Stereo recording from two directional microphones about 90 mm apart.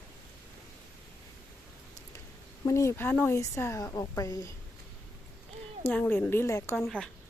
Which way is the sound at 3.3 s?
35° left (ahead or behind).